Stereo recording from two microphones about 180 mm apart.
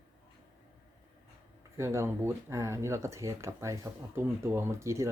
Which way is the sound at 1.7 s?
15° right (ahead or behind).